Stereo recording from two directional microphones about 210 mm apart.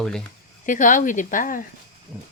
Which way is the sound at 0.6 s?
40° left (ahead or behind).